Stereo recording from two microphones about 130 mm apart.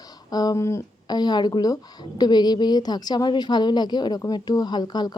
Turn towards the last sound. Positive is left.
turn(degrees=30)  # may be behind; listen again after turning